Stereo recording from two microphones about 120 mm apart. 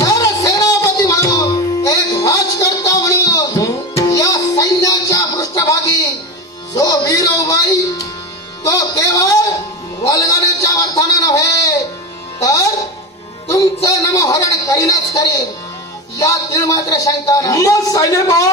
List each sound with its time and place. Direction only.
0.0 s music: 30° left (ahead or behind)
6.7 s speech: 30° left (ahead or behind)
13.8 s speech: 25° left (ahead or behind)